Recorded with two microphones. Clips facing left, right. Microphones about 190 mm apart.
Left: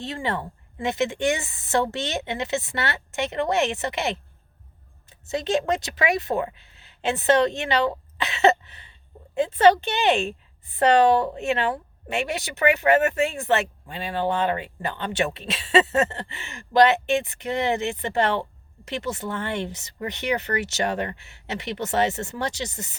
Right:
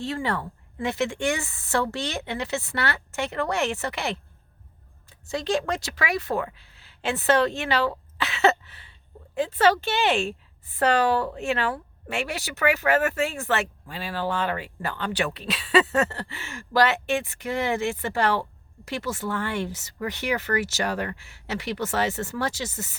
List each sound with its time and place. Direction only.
0.0 s a woman's voice: 20° left (ahead or behind)
5.3 s a woman's voice: 20° left (ahead or behind)